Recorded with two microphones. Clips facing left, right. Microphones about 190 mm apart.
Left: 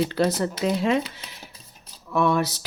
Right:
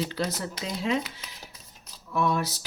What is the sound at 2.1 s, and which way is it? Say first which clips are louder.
Speech: left 5 dB; 75° left (ahead or behind).